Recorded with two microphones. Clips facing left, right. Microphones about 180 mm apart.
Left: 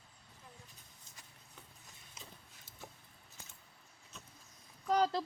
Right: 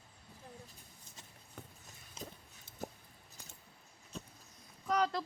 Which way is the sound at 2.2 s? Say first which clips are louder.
Right 9 dB; 30° right (ahead or behind).